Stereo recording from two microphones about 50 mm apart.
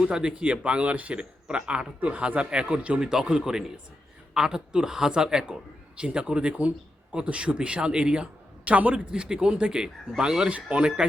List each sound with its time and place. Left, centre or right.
0.0 s a man's voice: centre
3.0 s a man's voice: centre